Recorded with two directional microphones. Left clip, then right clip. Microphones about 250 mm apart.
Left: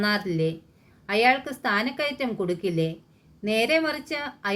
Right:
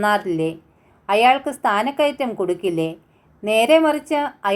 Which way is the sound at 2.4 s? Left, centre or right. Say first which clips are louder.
Right 5 dB; centre.